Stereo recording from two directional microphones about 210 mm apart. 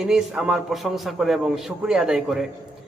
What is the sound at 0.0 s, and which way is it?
A man's voice, centre (ahead or behind).